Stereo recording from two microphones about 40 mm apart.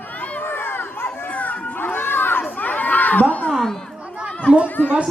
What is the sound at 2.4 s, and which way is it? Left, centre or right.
Crowd, left.